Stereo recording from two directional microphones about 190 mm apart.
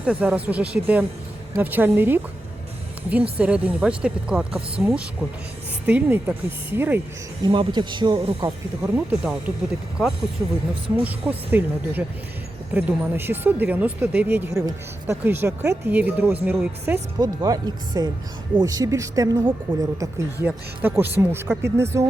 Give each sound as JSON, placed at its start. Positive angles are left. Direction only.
{"t": 0.0, "sound": "speech", "side_deg": -5}
{"t": 3.3, "sound": "speech", "side_deg": -5}
{"t": 7.4, "sound": "speech", "side_deg": -25}
{"t": 8.8, "sound": "speech", "side_deg": -5}
{"t": 11.0, "sound": "speech", "side_deg": -10}